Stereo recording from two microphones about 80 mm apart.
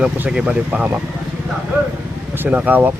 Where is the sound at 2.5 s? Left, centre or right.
Right.